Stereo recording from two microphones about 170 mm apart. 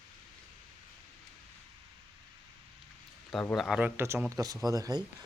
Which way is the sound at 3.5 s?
Centre (ahead or behind).